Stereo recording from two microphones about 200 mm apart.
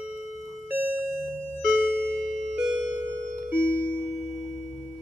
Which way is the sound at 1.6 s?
Centre (ahead or behind).